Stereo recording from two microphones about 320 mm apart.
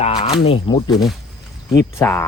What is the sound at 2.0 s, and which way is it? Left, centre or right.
Speech, centre.